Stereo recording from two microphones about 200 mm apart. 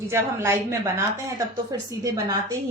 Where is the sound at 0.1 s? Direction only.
10° right (ahead or behind).